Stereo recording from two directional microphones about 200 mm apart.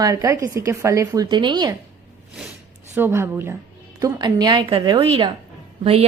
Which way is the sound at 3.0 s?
10° right (ahead or behind).